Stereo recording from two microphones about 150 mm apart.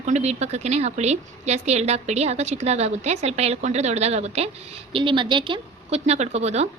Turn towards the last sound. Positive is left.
turn(degrees=-45)  # may be behind; listen again after turning